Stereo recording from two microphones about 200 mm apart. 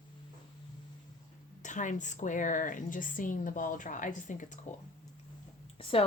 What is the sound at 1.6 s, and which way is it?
A woman's voice, 40° left (ahead or behind).